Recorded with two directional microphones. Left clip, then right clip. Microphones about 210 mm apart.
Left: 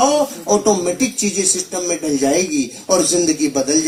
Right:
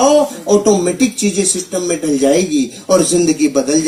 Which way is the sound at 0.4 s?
50° right (ahead or behind).